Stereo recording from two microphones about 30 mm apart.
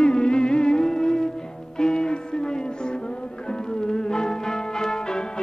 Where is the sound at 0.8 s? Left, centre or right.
Left.